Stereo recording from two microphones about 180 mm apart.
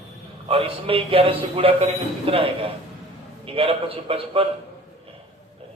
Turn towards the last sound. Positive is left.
turn(degrees=-30)  # may be behind; listen again after turning